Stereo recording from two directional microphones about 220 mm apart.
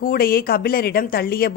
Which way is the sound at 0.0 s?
40° left (ahead or behind).